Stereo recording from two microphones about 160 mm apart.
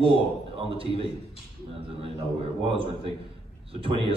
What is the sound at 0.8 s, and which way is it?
Speech, 35° right (ahead or behind).